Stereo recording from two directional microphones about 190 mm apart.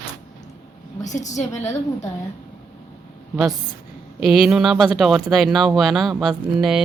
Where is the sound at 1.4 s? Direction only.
15° left (ahead or behind).